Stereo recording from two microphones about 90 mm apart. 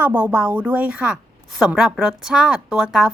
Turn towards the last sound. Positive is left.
turn(degrees=-5)  # may be behind; listen again after turning